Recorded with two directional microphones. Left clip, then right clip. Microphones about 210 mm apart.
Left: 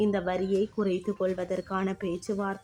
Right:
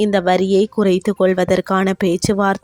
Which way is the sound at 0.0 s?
45° right (ahead or behind).